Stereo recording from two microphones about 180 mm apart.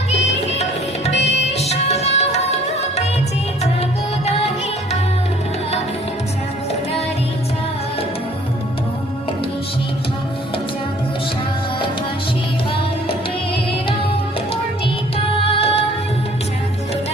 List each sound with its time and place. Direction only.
0.1 s music: 40° left (ahead or behind)
15.2 s music: 30° left (ahead or behind)